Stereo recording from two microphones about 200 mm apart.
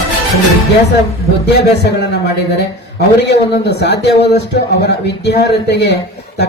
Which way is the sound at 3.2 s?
60° left (ahead or behind).